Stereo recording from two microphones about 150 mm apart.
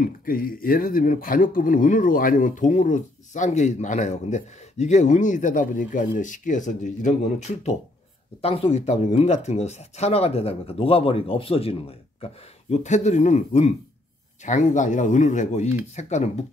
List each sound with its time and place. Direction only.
0.0 s speech: 70° left (ahead or behind); by 16.4 s 50° left (ahead or behind)